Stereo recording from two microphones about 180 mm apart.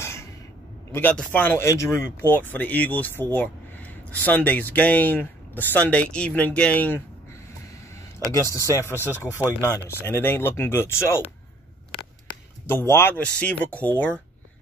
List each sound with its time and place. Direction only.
0.0 s a sound: 15° left (ahead or behind)
0.9 s speech: 10° left (ahead or behind)
8.3 s speech: 15° left (ahead or behind)
12.6 s speech: 15° left (ahead or behind)